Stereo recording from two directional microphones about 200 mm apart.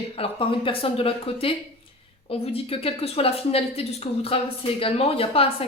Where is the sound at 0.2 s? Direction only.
25° left (ahead or behind).